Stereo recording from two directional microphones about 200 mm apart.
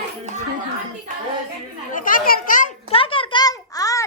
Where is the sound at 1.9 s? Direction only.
45° left (ahead or behind).